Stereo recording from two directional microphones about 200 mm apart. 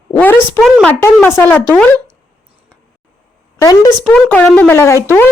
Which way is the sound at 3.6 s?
15° left (ahead or behind).